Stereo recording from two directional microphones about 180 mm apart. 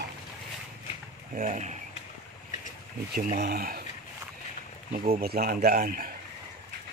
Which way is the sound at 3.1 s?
60° right (ahead or behind).